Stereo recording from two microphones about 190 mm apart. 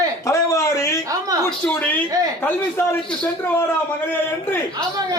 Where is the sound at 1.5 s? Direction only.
5° left (ahead or behind).